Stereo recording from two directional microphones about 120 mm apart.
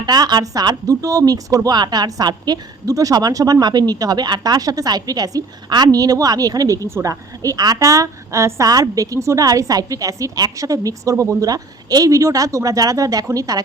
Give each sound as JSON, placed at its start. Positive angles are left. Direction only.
{"t": 0.0, "sound": "speech", "side_deg": -35}